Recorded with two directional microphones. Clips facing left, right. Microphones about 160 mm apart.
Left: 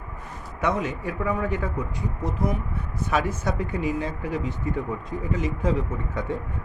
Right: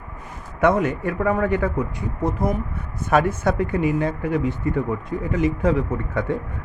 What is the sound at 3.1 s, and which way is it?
Speech, 55° right (ahead or behind).